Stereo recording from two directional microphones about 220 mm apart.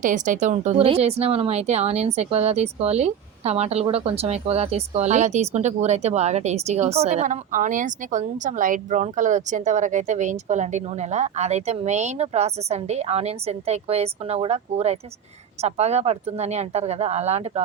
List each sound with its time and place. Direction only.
0.0 s speech: 35° right (ahead or behind)